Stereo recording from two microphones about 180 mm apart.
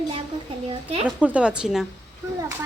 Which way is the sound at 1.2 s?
5° right (ahead or behind).